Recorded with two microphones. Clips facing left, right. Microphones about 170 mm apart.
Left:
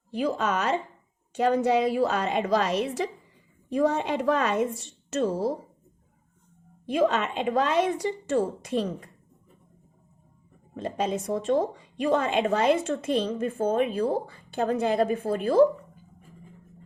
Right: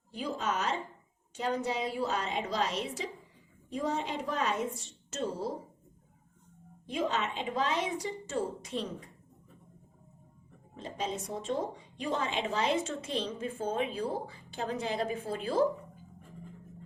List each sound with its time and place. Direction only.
0.1 s a woman's voice: 80° left
6.8 s speech: 70° left (ahead or behind)
10.8 s speech: 60° left (ahead or behind)